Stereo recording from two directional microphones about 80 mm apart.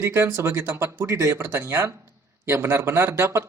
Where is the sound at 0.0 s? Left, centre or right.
Right.